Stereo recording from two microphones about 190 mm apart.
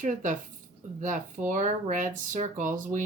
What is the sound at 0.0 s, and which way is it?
A woman's voice, 40° right (ahead or behind).